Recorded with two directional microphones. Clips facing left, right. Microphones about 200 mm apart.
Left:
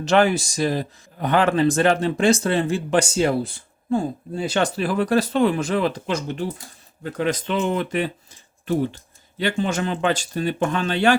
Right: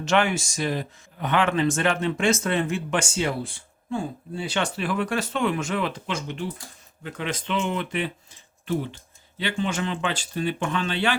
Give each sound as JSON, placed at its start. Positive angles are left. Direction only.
{"t": 0.0, "sound": "speech", "side_deg": 35}